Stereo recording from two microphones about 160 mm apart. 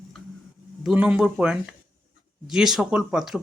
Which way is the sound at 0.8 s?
5° right (ahead or behind).